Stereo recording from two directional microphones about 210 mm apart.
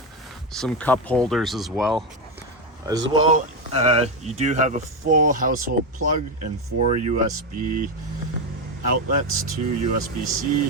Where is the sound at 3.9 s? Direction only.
30° right (ahead or behind).